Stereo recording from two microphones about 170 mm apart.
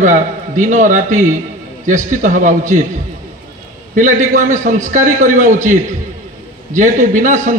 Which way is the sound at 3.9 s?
50° right (ahead or behind).